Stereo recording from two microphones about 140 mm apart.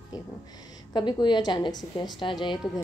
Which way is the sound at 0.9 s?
30° left (ahead or behind).